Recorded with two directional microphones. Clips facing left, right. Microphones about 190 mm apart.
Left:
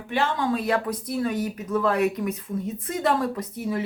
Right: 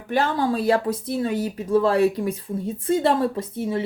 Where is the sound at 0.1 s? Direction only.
35° right (ahead or behind).